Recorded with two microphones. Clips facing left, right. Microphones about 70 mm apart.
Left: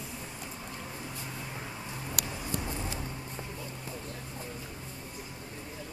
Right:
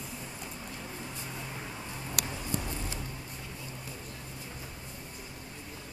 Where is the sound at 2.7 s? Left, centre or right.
Centre.